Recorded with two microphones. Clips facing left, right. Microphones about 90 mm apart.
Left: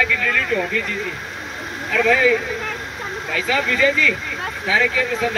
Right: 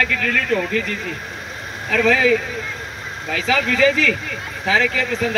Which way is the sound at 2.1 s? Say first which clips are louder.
Even; 75° right (ahead or behind).